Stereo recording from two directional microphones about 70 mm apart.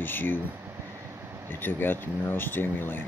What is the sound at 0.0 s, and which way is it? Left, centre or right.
Speech, left.